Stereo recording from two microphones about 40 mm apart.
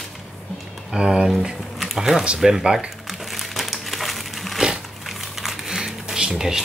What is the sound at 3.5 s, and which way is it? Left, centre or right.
Crumpling, centre.